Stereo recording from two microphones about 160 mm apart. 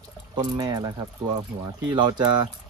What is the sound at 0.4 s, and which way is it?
Speech, 25° right (ahead or behind).